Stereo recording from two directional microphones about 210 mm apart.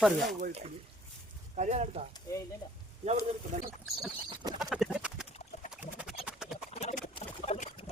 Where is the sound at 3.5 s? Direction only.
35° right (ahead or behind).